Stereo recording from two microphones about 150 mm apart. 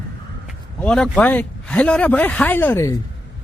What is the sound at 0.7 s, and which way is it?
Speech, 5° left (ahead or behind).